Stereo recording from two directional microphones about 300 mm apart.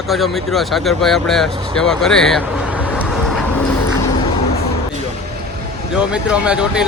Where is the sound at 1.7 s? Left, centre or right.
Centre.